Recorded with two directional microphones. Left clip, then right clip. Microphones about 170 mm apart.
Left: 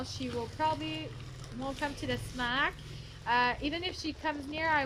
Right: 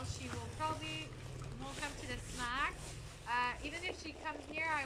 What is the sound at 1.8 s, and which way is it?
Speech, 50° left (ahead or behind).